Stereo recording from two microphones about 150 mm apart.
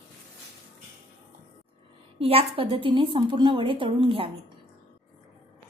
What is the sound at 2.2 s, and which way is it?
A woman's voice, 40° right (ahead or behind).